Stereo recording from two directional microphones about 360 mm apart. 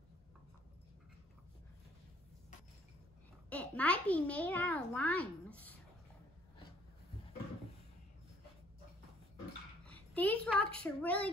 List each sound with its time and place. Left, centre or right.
3.4 s a child's voice: centre
9.8 s speech: centre